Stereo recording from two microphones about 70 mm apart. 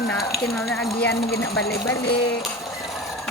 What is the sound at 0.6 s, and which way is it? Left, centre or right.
Speech, centre.